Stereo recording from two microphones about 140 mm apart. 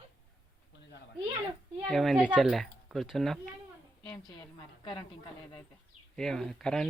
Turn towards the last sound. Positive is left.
turn(degrees=5)  # may be behind; listen again after turning